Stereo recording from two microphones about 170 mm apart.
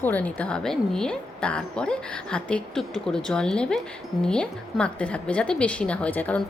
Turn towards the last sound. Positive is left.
turn(degrees=10)  # may be behind; listen again after turning